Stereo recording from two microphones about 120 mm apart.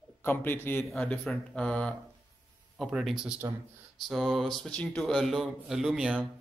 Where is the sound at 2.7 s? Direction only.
5° right (ahead or behind).